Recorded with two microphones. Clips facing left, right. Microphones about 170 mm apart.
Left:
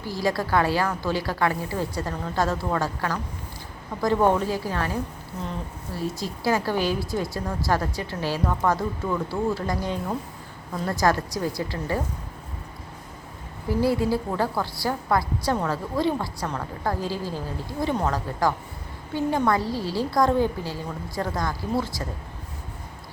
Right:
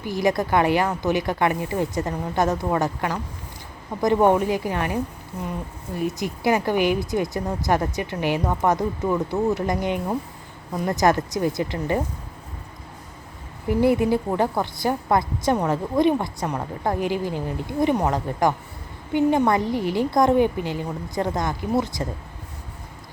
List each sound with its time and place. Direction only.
0.0 s a woman's voice: 20° right (ahead or behind)
13.7 s a woman's voice: 20° right (ahead or behind)